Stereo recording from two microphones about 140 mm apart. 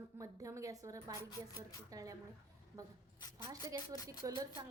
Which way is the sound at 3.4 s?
25° right (ahead or behind).